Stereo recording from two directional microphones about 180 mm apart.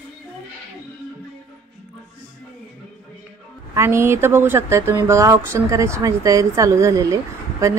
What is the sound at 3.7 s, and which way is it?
A woman's voice, 15° right (ahead or behind).